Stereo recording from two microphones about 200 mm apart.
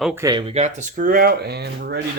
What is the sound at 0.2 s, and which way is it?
Speech, 20° right (ahead or behind).